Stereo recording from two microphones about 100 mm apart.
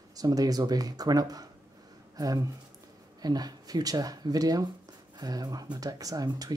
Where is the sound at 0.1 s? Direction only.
40° right (ahead or behind).